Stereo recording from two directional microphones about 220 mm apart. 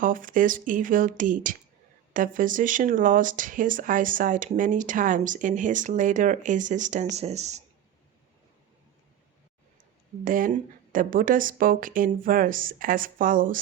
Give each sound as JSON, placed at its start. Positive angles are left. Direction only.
{"t": 0.0, "sound": "speech", "side_deg": -40}
{"t": 10.2, "sound": "speech", "side_deg": -35}